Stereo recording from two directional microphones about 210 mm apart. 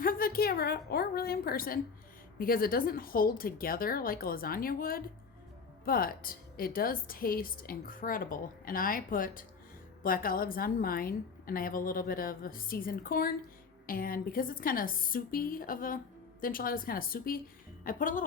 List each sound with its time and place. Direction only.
0.0 s a woman's voice: 45° left (ahead or behind)